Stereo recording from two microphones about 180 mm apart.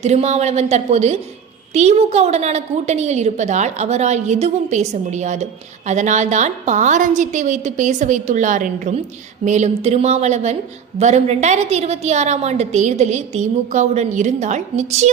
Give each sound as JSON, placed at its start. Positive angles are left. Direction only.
{"t": 0.0, "sound": "a woman's voice", "side_deg": -40}